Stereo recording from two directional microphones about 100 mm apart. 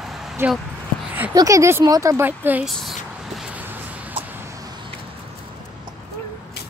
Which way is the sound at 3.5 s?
15° right (ahead or behind).